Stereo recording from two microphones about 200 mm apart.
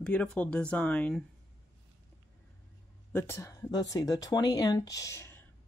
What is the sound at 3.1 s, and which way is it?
Speech, 10° left (ahead or behind).